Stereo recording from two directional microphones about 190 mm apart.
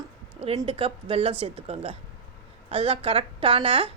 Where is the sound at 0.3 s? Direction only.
30° right (ahead or behind).